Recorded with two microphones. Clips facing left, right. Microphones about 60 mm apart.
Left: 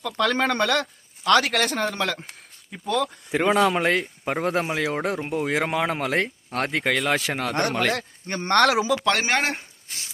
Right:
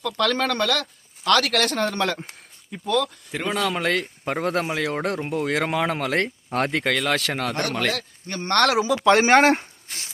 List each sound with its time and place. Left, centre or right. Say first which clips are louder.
0.0 s speech: even; centre
2.9 s speech: even; centre
8.3 s speech: left 1 dB; left
8.5 s speech: even; centre
9.3 s speech: right 8 dB; right